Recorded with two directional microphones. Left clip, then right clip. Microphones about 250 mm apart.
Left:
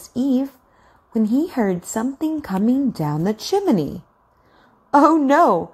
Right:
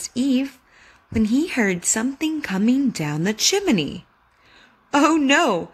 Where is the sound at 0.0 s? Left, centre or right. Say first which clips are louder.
Left 1 dB; centre.